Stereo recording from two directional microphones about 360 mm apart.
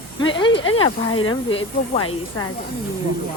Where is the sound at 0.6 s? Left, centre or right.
Left.